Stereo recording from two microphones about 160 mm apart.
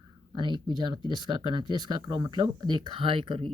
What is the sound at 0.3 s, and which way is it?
Speech, 30° right (ahead or behind).